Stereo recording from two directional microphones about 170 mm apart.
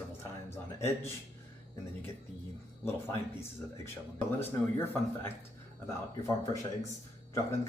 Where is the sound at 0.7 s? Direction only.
15° left (ahead or behind).